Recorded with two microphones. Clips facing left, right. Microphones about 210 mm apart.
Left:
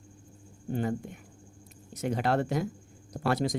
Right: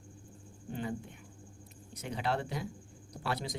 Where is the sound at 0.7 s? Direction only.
45° left (ahead or behind).